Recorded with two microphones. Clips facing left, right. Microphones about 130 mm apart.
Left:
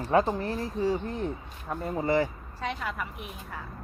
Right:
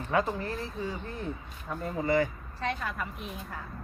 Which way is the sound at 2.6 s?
10° left (ahead or behind).